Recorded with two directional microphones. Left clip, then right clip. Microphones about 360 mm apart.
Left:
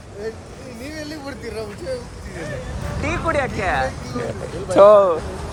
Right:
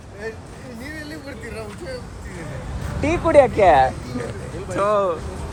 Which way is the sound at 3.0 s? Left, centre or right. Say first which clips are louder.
Right 7 dB; centre.